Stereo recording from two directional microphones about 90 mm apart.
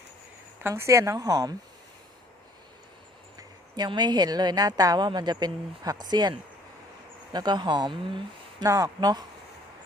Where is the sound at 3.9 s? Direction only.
55° right (ahead or behind).